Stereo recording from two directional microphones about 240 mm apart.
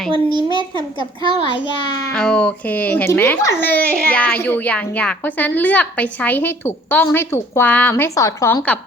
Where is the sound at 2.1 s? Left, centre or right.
Centre.